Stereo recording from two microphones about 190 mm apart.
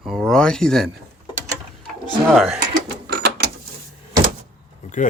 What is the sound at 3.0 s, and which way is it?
Mechanisms, 60° right (ahead or behind).